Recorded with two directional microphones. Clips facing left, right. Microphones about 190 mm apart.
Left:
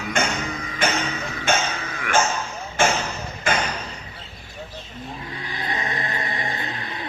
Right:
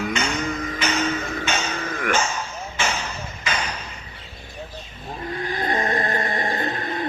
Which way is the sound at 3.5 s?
50° left (ahead or behind).